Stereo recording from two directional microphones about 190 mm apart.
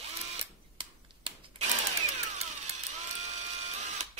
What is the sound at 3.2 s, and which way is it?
Printer, 35° right (ahead or behind).